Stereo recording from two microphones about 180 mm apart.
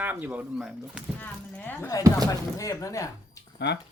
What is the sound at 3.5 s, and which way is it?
Speech, 75° left (ahead or behind).